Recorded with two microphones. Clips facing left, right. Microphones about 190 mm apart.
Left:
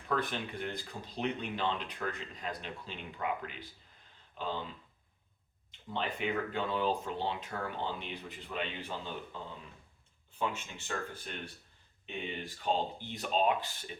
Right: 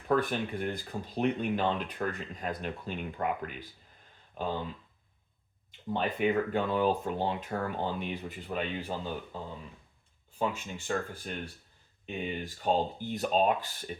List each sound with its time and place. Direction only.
0.1 s speech: 50° right (ahead or behind)
5.9 s speech: 50° right (ahead or behind)
10.3 s speech: 40° right (ahead or behind)
12.0 s speech: 45° right (ahead or behind)